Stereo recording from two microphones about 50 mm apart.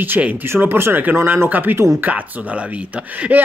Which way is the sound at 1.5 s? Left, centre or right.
Right.